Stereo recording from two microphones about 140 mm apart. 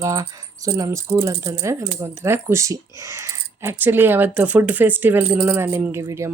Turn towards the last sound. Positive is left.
turn(degrees=-20)  # may be behind; listen again after turning